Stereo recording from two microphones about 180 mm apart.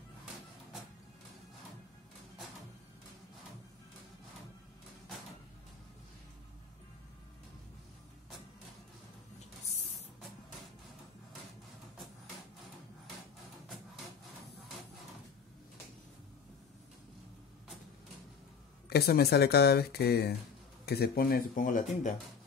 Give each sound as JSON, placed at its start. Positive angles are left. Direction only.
{"t": 18.9, "sound": "speech", "side_deg": 60}